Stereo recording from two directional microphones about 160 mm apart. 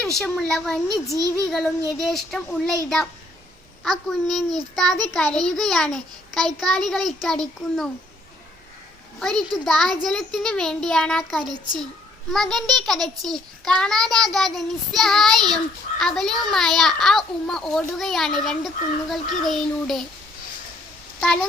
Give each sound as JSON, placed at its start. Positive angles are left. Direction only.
{"t": 0.2, "sound": "a child's voice", "side_deg": 0}
{"t": 1.1, "sound": "a child's voice", "side_deg": -20}
{"t": 1.5, "sound": "a child's voice", "side_deg": 0}
{"t": 3.8, "sound": "a child's voice", "side_deg": 0}
{"t": 9.1, "sound": "a child's voice", "side_deg": 0}